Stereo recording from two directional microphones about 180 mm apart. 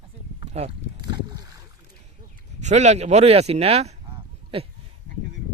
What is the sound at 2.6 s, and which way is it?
Speech, 40° right (ahead or behind).